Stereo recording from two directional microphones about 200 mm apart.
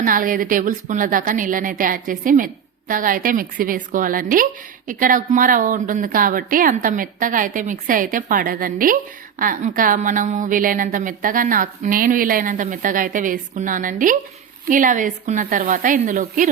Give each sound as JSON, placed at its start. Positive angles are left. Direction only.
{"t": 0.0, "sound": "a woman's voice", "side_deg": -45}